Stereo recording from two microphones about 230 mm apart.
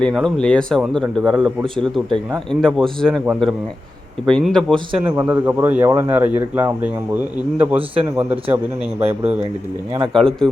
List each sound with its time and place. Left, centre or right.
0.0 s speech: centre
4.7 s a man's voice: right
7.8 s a man's voice: centre
9.0 s speech: right
10.1 s speech: centre